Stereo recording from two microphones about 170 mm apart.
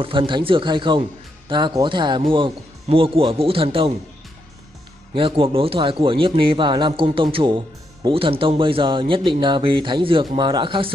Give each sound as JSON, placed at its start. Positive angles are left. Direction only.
{"t": 0.0, "sound": "speech", "side_deg": -30}
{"t": 5.1, "sound": "speech", "side_deg": -30}